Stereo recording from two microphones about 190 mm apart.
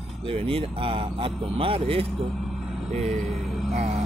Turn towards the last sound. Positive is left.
turn(degrees=-35)  # may be behind; listen again after turning